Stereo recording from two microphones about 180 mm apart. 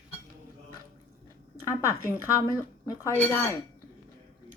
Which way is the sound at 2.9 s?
15° left (ahead or behind).